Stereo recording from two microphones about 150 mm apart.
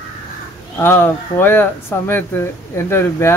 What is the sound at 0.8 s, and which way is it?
Speech, 15° left (ahead or behind).